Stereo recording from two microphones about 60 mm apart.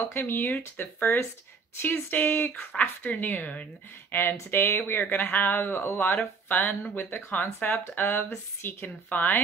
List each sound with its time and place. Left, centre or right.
0.1 s speech: left